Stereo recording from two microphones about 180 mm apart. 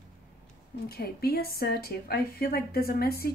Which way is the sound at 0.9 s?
60° left (ahead or behind).